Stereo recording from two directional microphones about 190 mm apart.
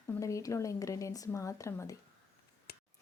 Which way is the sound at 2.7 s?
55° left (ahead or behind).